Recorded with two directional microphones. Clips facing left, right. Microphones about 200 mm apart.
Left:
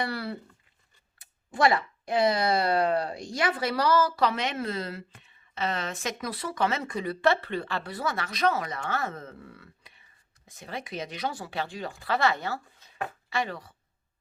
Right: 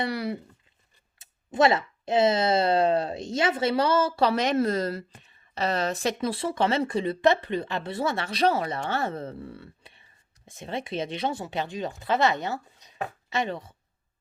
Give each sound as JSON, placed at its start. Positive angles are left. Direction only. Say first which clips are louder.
{"t": 0.0, "sound": "speech", "louder": "right 3 dB", "side_deg": -20}